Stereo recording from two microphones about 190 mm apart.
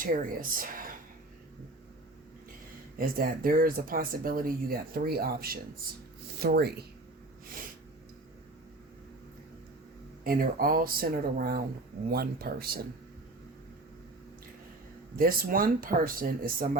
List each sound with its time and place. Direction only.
0.0 s speech: 45° right (ahead or behind)
3.0 s speech: 50° right (ahead or behind)
10.2 s speech: 50° right (ahead or behind)
15.1 s speech: 50° right (ahead or behind)